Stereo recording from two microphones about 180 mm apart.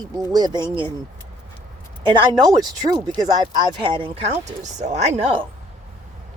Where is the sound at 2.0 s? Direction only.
25° right (ahead or behind).